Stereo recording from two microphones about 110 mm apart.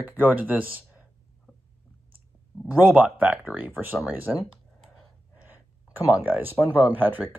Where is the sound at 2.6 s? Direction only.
15° right (ahead or behind).